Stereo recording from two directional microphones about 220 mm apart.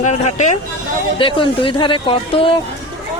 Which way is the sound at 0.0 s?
30° left (ahead or behind).